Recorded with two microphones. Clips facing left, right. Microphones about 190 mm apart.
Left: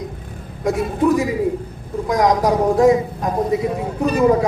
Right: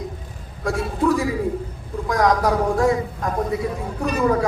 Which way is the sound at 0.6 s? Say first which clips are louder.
Left 4 dB; 20° left (ahead or behind).